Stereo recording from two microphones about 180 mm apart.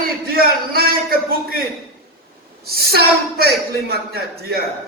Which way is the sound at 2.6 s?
60° right (ahead or behind).